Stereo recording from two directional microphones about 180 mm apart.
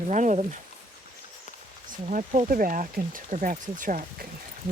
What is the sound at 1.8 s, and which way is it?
Speech, 45° right (ahead or behind).